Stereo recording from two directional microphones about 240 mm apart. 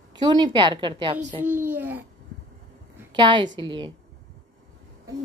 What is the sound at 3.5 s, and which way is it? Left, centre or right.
Speech, centre.